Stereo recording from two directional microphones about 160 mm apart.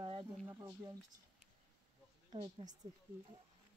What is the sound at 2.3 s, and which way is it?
Speech, 30° right (ahead or behind).